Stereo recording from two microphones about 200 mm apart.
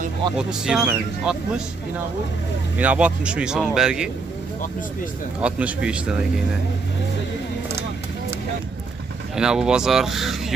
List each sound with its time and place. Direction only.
0.4 s speech: 5° right (ahead or behind)
2.8 s speech: 5° right (ahead or behind)
5.4 s speech: 5° right (ahead or behind)
9.3 s speech: 5° right (ahead or behind)